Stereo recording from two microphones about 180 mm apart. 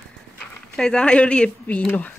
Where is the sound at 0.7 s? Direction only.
5° left (ahead or behind).